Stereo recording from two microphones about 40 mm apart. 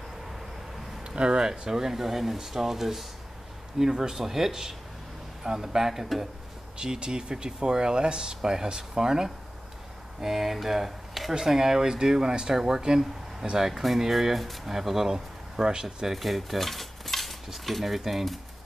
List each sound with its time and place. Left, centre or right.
1.0 s speech: right
10.2 s speech: centre
16.1 s speech: centre